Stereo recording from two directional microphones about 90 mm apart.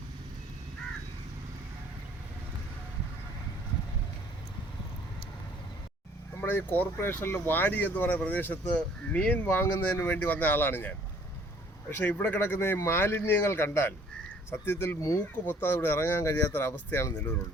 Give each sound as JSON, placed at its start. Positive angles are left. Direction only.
{"t": 6.4, "sound": "speech", "side_deg": 20}